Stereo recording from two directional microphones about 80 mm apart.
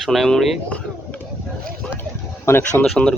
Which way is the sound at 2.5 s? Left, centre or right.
Left.